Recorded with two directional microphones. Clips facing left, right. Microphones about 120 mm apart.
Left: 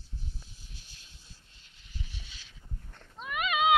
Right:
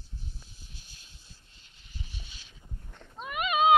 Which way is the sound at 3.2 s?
35° right (ahead or behind).